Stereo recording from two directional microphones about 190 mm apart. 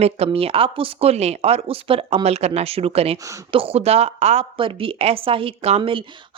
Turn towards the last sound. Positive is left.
turn(degrees=-30)  # may be behind; listen again after turning